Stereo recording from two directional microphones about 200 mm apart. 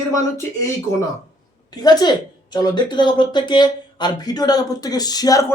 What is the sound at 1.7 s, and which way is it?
A woman's voice, 20° left (ahead or behind).